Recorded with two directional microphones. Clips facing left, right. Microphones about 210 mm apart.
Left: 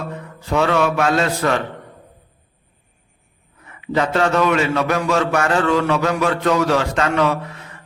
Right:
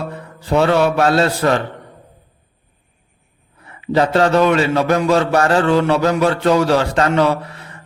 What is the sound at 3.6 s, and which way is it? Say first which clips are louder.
A man's voice: right 4 dB; 30° right (ahead or behind).